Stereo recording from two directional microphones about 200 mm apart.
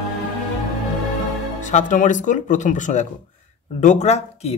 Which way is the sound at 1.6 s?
40° left (ahead or behind).